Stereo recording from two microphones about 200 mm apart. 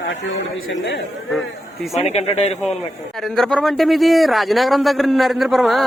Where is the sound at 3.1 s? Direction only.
Centre (ahead or behind).